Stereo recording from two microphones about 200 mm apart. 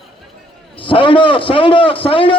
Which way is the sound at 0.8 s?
25° left (ahead or behind).